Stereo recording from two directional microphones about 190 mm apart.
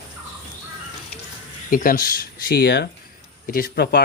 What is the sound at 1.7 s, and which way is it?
Speech, 45° left (ahead or behind).